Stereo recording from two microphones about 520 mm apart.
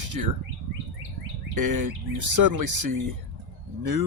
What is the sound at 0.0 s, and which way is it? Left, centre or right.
Bird, right.